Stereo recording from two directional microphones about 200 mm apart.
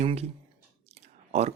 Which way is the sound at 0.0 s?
30° right (ahead or behind).